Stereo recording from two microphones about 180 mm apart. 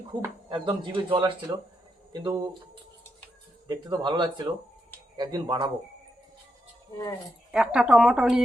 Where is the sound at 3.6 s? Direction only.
25° right (ahead or behind).